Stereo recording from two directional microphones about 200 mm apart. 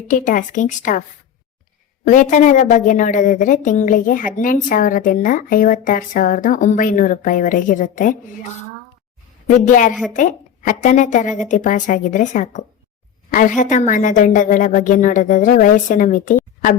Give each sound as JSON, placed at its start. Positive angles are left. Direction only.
{"t": 0.1, "sound": "a woman's voice", "side_deg": 40}
{"t": 2.0, "sound": "a woman's voice", "side_deg": 40}
{"t": 9.5, "sound": "a woman's voice", "side_deg": 40}